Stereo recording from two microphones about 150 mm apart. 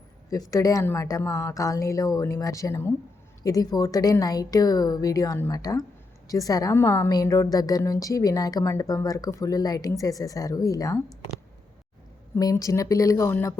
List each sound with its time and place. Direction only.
0.3 s a woman's voice: 25° left (ahead or behind)
12.4 s a woman's voice: 25° left (ahead or behind)